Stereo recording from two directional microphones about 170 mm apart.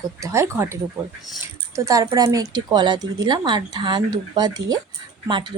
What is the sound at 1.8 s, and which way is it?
Speech, 20° right (ahead or behind).